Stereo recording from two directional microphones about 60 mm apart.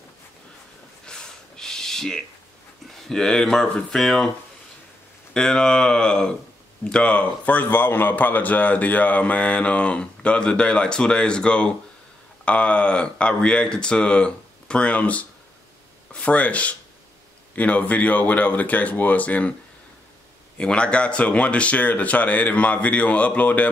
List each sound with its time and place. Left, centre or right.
1.0 s a sound: centre
3.1 s speech: centre
5.3 s a man's voice: centre
20.5 s a man's voice: centre